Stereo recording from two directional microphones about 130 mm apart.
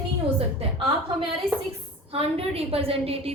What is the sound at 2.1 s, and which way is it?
A woman's voice, 50° right (ahead or behind).